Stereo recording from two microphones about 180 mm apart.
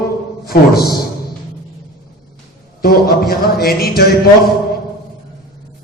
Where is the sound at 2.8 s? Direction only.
60° left (ahead or behind).